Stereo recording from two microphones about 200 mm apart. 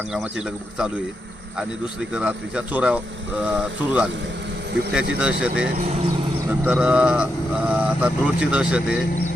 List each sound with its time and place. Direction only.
0.1 s speech: 5° right (ahead or behind)
2.1 s speech: 5° right (ahead or behind)
5.7 s speech: 30° right (ahead or behind)
6.5 s speech: 5° right (ahead or behind)